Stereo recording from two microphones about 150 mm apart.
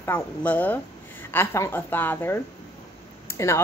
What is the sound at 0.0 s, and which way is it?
A woman's voice, 10° left (ahead or behind).